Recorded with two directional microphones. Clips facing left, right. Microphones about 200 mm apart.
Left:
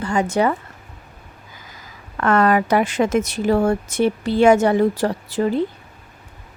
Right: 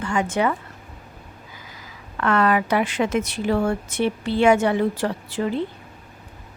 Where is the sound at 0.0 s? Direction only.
35° left (ahead or behind).